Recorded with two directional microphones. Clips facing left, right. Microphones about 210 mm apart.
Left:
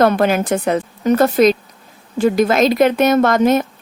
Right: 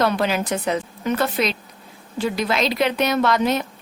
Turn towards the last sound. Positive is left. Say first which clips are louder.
# left 6 dB
turn(degrees=50)  # may be behind; listen again after turning